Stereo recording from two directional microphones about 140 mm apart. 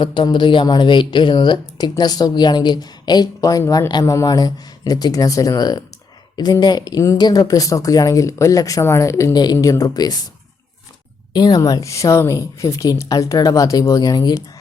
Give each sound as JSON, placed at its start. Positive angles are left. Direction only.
{"t": 0.0, "sound": "speech", "side_deg": 35}
{"t": 11.3, "sound": "speech", "side_deg": 30}